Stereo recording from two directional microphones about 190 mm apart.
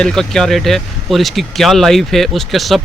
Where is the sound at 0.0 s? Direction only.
5° left (ahead or behind).